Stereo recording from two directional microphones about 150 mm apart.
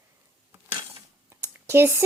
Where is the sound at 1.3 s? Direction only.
15° right (ahead or behind).